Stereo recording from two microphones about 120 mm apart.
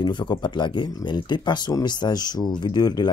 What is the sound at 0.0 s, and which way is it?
Speech, 40° left (ahead or behind).